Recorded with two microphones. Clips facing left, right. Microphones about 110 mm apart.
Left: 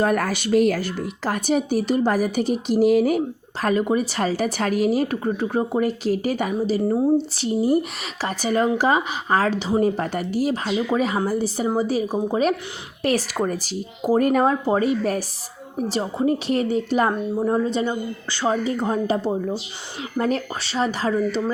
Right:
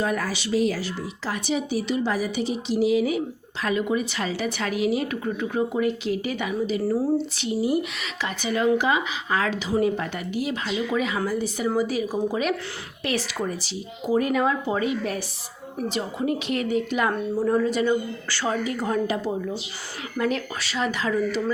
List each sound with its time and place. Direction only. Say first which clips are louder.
0.0 s a woman's voice: left 5 dB; 55° left (ahead or behind); by 7.1 s 25° left (ahead or behind)
7.3 s speech: left 4 dB; 35° left (ahead or behind)
13.0 s a woman's voice: left 6 dB; 40° left (ahead or behind)
17.1 s speech: left 1 dB; 25° left (ahead or behind)